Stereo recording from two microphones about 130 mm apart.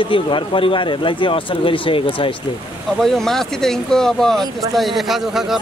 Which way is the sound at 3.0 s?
5° left (ahead or behind).